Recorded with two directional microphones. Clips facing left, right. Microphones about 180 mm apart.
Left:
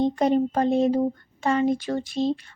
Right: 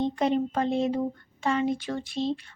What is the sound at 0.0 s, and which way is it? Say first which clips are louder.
Speech: left 4 dB; 40° left (ahead or behind).